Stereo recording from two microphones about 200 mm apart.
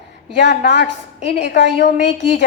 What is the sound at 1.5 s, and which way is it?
Speech, 60° left (ahead or behind).